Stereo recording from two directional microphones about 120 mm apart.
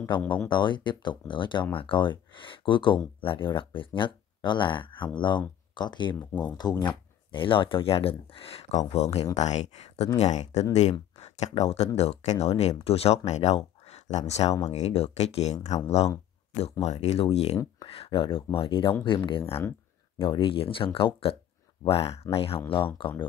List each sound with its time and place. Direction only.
0.1 s speech: 40° left (ahead or behind)